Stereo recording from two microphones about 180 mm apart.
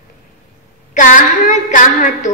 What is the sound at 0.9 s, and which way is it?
A woman's voice, 45° left (ahead or behind).